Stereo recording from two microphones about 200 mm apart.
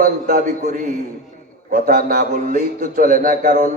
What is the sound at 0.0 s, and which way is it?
A man's voice, 45° right (ahead or behind).